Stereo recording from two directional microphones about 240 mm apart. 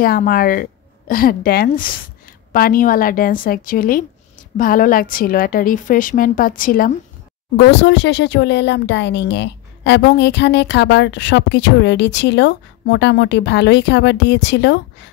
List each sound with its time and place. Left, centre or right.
0.0 s a woman's voice: left